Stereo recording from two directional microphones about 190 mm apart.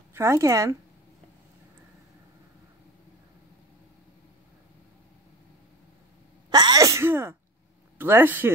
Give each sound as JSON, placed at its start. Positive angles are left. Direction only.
{"t": 0.1, "sound": "speech", "side_deg": -15}
{"t": 6.5, "sound": "sneeze", "side_deg": -20}
{"t": 8.0, "sound": "speech", "side_deg": -10}